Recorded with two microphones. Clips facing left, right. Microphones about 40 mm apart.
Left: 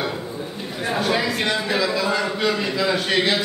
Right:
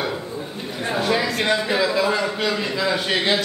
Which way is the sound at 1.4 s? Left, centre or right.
Centre.